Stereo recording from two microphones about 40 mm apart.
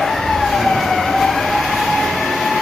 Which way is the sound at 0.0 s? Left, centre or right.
Centre.